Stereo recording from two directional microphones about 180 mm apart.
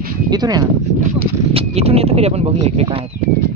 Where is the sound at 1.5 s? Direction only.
35° right (ahead or behind).